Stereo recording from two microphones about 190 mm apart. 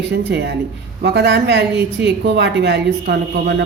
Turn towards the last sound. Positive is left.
turn(degrees=-65)  # may be behind; listen again after turning